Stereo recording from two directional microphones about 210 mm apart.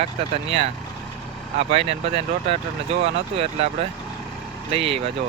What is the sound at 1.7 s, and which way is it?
Speech, 30° right (ahead or behind).